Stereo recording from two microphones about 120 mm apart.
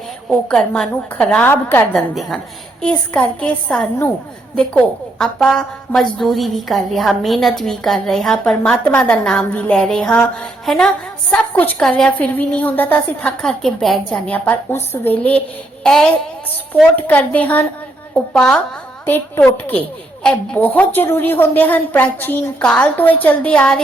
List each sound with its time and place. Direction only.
0.3 s a woman's voice: 10° left (ahead or behind)
1.9 s a woman's voice: centre (ahead or behind)
2.8 s a woman's voice: 15° left (ahead or behind)
14.3 s a woman's voice: 15° left (ahead or behind)